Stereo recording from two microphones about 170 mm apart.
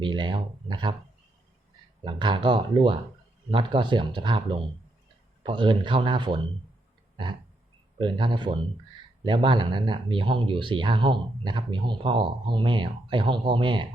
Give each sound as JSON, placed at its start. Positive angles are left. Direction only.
{"t": 0.0, "sound": "speech", "side_deg": -25}
{"t": 2.0, "sound": "speech", "side_deg": -30}
{"t": 7.9, "sound": "speech", "side_deg": -30}